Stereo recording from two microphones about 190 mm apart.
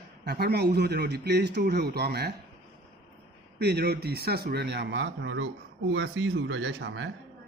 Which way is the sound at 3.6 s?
60° right (ahead or behind).